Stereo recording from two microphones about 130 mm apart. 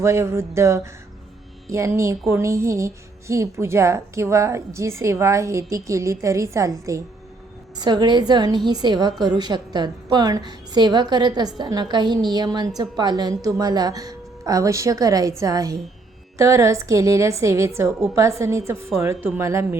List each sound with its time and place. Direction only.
0.0 s a woman's voice: 20° right (ahead or behind)